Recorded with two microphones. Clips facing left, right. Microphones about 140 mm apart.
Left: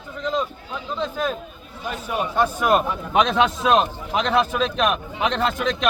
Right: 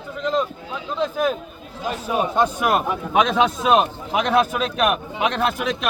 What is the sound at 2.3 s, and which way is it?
A man's voice, 15° right (ahead or behind).